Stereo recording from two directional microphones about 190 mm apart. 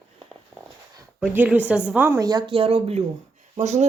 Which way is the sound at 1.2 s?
10° right (ahead or behind).